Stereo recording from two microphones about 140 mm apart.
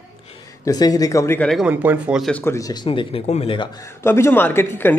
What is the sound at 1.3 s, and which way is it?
Speech, 5° left (ahead or behind).